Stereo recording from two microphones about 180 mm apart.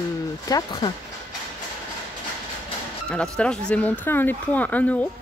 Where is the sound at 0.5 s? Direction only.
20° left (ahead or behind).